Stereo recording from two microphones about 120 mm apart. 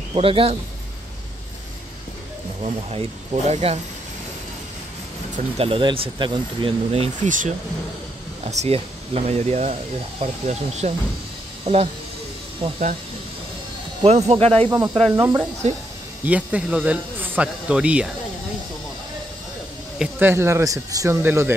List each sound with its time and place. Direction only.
0.1 s speech: 50° right (ahead or behind)
2.6 s speech: 60° right (ahead or behind)
5.6 s speech: 45° right (ahead or behind)
6.9 s speech: 75° right (ahead or behind)
8.5 s speech: 60° right (ahead or behind)
14.0 s speech: 60° right (ahead or behind)
15.1 s speech: 30° right (ahead or behind)
15.6 s speech: 65° right (ahead or behind)
16.3 s speech: 10° right (ahead or behind)
20.0 s speech: 15° right (ahead or behind)